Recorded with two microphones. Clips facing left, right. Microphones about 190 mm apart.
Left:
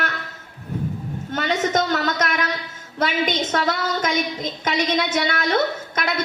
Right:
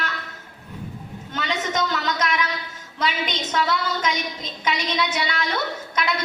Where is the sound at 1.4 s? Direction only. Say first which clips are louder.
Left 4 dB; 50° left (ahead or behind).